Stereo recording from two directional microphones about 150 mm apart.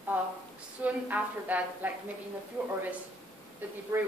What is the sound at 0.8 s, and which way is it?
A woman's voice, 10° right (ahead or behind).